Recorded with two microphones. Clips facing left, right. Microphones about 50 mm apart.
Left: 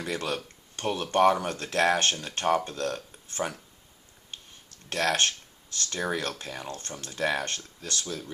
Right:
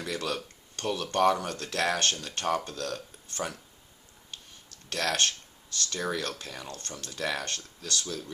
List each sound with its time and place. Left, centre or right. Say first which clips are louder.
0.0 s speech: left 1 dB; left
4.9 s speech: left 3 dB; left